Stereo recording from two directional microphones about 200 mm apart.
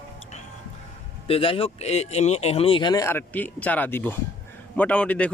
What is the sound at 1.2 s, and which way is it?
A man's voice, 25° left (ahead or behind).